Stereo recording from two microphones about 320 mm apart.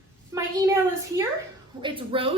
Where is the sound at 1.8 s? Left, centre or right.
Centre.